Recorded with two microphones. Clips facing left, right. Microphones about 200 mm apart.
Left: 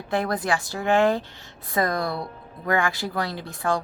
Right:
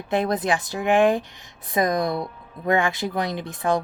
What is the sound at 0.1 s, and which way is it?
A woman's voice, 20° right (ahead or behind).